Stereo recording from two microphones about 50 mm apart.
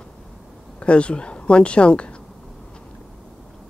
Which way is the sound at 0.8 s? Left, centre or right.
Left.